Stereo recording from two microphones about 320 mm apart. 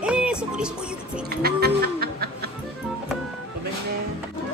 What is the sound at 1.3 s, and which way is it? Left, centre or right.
Music, right.